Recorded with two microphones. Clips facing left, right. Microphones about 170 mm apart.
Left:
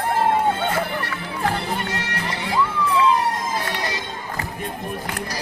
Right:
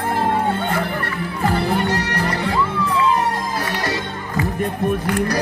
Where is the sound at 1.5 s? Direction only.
65° right (ahead or behind).